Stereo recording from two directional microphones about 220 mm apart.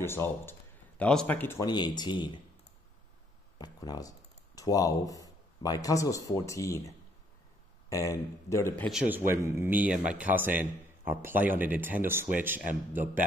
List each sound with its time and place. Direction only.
0.0 s speech: 10° left (ahead or behind)
3.5 s speech: 20° left (ahead or behind)
7.9 s speech: 15° left (ahead or behind)
9.0 s a man's voice: 10° right (ahead or behind)